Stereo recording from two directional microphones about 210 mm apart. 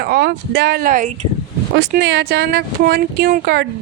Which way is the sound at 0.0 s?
45° right (ahead or behind).